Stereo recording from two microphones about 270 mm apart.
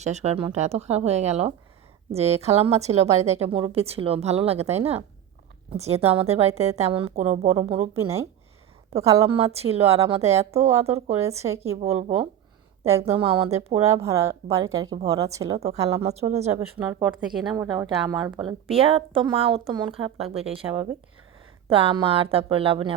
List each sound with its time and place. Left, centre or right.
0.0 s a woman's voice: right
9.0 s a woman's voice: centre
11.3 s speech: centre
11.7 s a woman's voice: right
14.0 s a woman's voice: centre
16.6 s a woman's voice: centre
21.7 s a woman's voice: right